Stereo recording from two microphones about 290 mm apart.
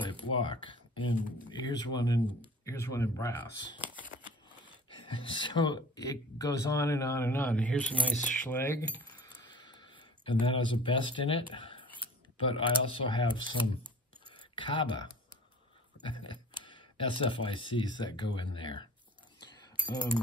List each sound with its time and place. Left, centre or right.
0.2 s speech: centre
4.9 s speech: centre
11.5 s a sound: centre
12.4 s speech: centre
14.3 s a sound: centre
16.0 s speech: centre